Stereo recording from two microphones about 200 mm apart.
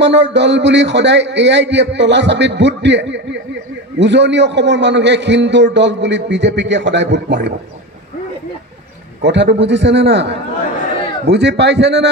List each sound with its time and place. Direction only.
0.0 s a man's voice: 60° right (ahead or behind)
9.2 s a man's voice: 60° right (ahead or behind)